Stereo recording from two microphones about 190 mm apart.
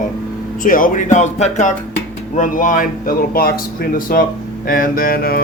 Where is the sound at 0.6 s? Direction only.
45° left (ahead or behind).